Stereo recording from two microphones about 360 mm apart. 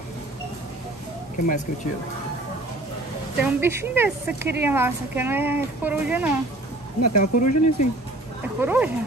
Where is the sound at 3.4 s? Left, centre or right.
Centre.